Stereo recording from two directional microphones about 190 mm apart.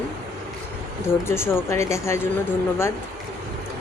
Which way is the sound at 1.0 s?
10° left (ahead or behind).